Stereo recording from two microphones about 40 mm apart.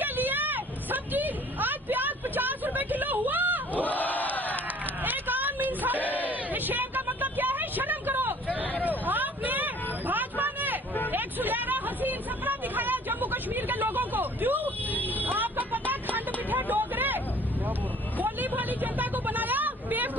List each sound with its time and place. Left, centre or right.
0.0 s vehicle: right
3.8 s crowd: left
5.0 s a sound: right
6.2 s vehicle: right
8.8 s hubbub: right
11.1 s a sound: right
15.2 s vehicle: right
18.2 s vehicle: right